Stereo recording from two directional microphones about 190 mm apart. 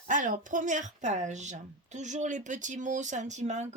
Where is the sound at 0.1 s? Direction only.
45° right (ahead or behind).